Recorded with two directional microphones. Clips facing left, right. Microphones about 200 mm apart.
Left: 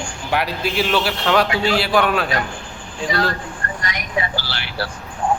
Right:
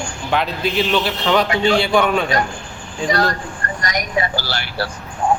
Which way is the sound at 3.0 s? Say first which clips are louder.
Right 3 dB; 40° right (ahead or behind).